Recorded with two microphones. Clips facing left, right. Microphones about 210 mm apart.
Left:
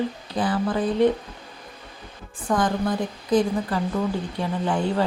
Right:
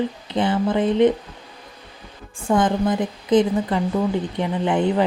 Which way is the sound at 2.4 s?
25° right (ahead or behind).